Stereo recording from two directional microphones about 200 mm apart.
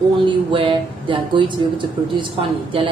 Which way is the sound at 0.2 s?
25° right (ahead or behind).